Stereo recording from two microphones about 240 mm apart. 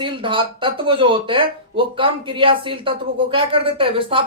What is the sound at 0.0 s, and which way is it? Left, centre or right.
Speech, right.